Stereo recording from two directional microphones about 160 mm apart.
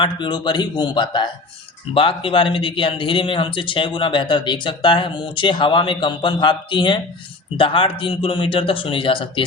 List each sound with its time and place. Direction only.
0.0 s a man's voice: 30° left (ahead or behind)